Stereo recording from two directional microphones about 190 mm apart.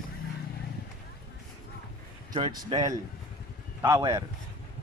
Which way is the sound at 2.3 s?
20° right (ahead or behind).